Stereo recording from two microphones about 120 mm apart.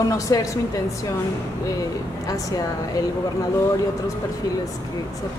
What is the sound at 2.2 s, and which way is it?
Speech, 30° left (ahead or behind).